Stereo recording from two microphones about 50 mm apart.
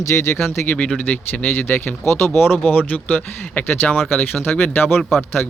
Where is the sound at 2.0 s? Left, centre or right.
Left.